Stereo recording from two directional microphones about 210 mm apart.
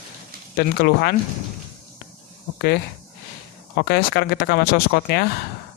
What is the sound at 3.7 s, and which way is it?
Speech, 45° left (ahead or behind).